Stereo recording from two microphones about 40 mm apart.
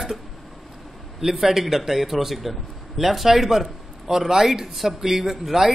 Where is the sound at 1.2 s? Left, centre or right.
Centre.